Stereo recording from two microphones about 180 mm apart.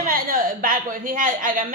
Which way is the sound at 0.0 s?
50° right (ahead or behind).